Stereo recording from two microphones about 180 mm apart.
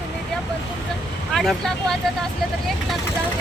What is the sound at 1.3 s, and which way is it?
Speech, centre (ahead or behind).